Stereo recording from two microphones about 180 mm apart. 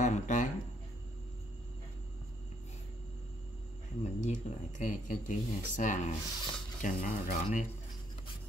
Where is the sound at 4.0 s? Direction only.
40° left (ahead or behind).